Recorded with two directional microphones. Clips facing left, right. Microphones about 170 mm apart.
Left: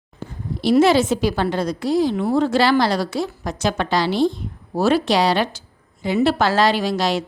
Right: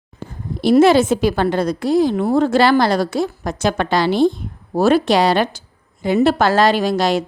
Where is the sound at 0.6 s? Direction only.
50° right (ahead or behind).